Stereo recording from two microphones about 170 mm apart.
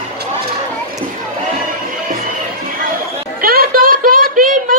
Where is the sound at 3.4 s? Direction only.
60° right (ahead or behind).